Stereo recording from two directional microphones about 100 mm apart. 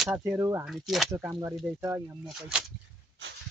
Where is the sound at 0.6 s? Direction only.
Centre (ahead or behind).